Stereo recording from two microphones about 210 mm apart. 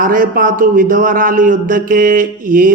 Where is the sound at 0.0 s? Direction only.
40° right (ahead or behind).